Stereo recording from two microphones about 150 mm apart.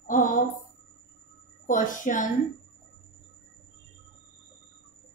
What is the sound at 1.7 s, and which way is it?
Speech, 60° left (ahead or behind).